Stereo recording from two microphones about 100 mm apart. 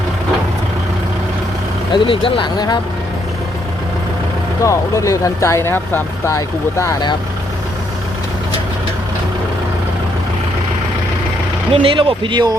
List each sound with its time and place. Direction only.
1.9 s speech: 60° left (ahead or behind)
4.6 s speech: 30° left (ahead or behind)
11.7 s speech: 65° right (ahead or behind); by 12.5 s 45° right (ahead or behind)